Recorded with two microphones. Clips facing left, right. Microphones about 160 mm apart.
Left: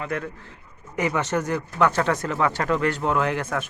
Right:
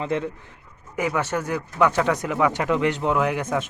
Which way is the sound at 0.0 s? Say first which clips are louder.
Right 4 dB; 25° right (ahead or behind).